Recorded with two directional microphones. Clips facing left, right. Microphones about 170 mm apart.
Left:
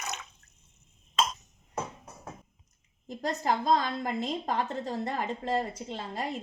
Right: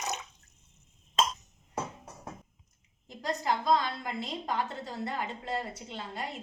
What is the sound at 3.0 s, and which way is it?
A woman's voice, 45° left (ahead or behind).